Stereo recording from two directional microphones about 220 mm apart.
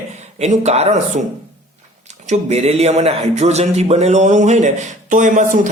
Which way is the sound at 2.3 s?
30° right (ahead or behind).